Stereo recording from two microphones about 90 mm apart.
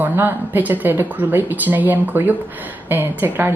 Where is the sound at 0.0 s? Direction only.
20° right (ahead or behind).